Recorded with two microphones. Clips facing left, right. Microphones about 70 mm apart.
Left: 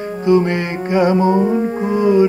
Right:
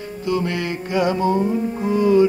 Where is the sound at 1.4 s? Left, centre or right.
Left.